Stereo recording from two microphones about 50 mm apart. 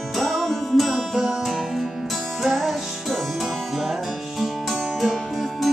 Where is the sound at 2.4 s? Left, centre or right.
Centre.